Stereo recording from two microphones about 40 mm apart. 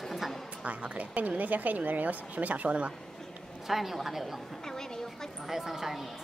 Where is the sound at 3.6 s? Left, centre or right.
Centre.